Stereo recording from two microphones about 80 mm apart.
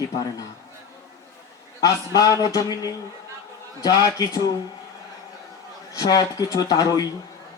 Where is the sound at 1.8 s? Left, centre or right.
Left.